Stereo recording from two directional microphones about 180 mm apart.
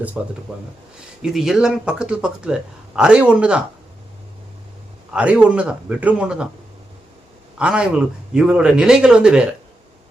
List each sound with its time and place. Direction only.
0.2 s speech: 5° right (ahead or behind)
5.1 s speech: 5° right (ahead or behind)
7.6 s speech: 5° right (ahead or behind)